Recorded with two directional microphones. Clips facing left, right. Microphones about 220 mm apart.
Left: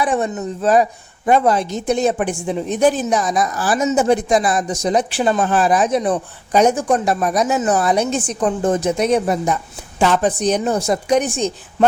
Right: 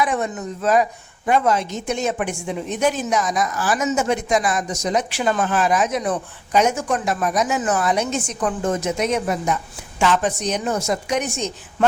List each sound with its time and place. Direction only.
0.0 s a woman's voice: 30° left (ahead or behind)